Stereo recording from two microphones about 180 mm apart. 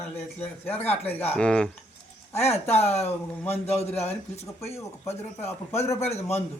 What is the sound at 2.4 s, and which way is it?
Speech, 35° left (ahead or behind).